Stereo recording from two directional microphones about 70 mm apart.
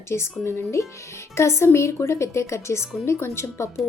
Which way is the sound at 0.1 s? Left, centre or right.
Left.